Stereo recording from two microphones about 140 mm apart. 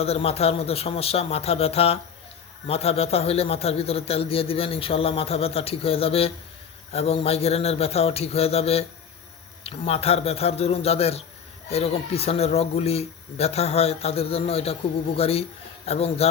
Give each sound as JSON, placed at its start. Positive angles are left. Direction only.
{"t": 0.0, "sound": "speech", "side_deg": 45}